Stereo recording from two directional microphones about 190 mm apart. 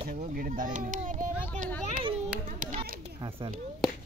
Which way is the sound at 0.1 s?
45° right (ahead or behind).